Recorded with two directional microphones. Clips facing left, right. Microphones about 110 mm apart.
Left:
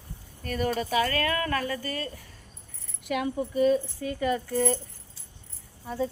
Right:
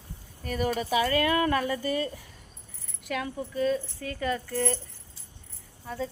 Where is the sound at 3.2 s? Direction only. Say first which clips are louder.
Left 5 dB; 15° left (ahead or behind).